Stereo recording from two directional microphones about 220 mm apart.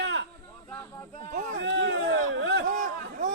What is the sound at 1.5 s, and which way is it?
A man's voice, 55° right (ahead or behind).